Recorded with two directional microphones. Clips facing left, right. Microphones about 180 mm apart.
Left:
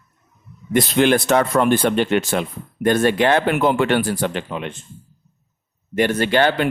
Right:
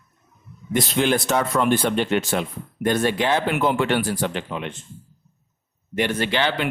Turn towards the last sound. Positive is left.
turn(degrees=45)  # may be behind; listen again after turning